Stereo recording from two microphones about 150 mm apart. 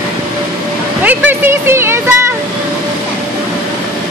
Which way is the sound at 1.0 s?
10° right (ahead or behind).